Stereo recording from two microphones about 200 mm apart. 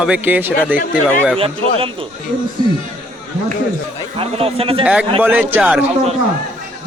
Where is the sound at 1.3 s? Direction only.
30° right (ahead or behind).